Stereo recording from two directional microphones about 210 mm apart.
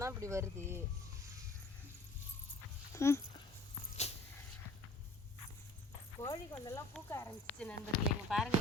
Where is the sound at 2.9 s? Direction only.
15° left (ahead or behind).